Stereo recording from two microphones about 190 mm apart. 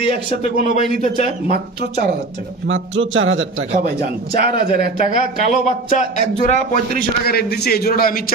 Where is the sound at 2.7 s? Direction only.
90° right.